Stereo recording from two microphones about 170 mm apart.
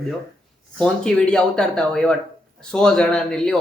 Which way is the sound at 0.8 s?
5° left (ahead or behind).